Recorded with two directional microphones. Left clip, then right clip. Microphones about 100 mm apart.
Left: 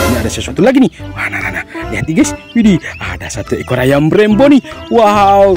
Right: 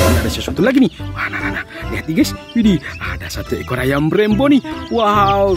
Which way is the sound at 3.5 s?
40° left (ahead or behind).